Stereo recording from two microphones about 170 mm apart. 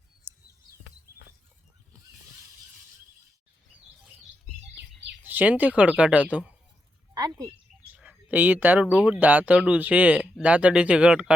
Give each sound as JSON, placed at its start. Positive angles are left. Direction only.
{"t": 0.3, "sound": "bird", "side_deg": -15}
{"t": 5.2, "sound": "speech", "side_deg": -10}
{"t": 7.1, "sound": "a sound", "side_deg": -20}
{"t": 7.9, "sound": "speech", "side_deg": -10}